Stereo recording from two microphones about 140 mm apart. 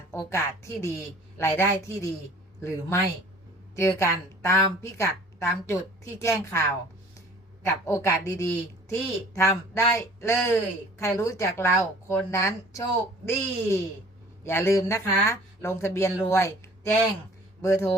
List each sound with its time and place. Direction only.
0.1 s a woman's voice: 20° left (ahead or behind)